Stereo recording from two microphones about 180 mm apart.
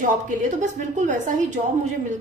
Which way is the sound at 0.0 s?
45° right (ahead or behind).